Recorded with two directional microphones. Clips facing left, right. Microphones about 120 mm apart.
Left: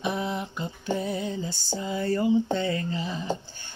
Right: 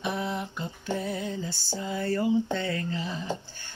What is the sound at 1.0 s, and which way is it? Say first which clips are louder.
Music: left 2 dB; 20° left (ahead or behind).